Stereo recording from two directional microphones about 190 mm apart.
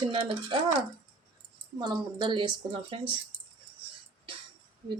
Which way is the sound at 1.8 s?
25° right (ahead or behind).